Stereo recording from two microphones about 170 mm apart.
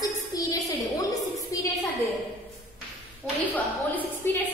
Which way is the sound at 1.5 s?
20° left (ahead or behind).